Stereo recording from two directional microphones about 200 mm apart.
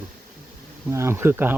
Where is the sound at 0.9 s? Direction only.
10° right (ahead or behind).